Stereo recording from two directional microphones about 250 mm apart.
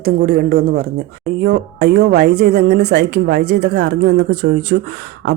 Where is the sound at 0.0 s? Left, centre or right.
Right.